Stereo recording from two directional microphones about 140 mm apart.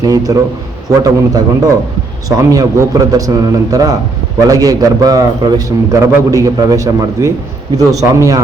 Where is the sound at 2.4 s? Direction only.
25° right (ahead or behind).